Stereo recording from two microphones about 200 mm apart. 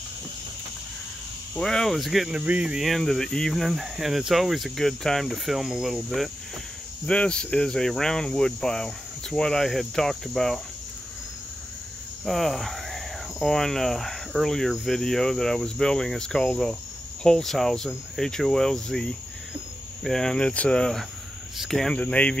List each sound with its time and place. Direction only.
1.5 s speech: 5° left (ahead or behind)
12.3 s speech: centre (ahead or behind)